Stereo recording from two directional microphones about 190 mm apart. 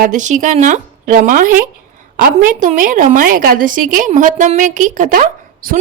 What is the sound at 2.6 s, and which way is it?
A woman's voice, 45° right (ahead or behind).